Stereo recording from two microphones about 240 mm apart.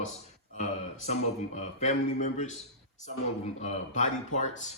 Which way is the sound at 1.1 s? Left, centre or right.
Left.